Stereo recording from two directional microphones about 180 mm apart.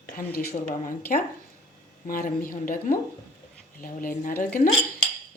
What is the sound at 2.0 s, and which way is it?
Speech, 50° left (ahead or behind).